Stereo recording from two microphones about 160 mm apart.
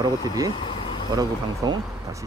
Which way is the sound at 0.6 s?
30° left (ahead or behind).